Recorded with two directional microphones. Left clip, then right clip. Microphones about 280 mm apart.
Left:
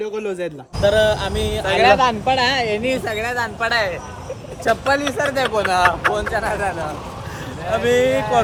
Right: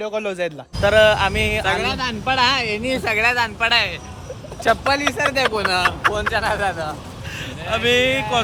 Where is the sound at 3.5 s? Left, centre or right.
Centre.